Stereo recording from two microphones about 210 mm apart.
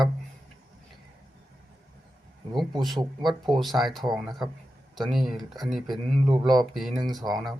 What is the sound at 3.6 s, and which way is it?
Speech, centre (ahead or behind).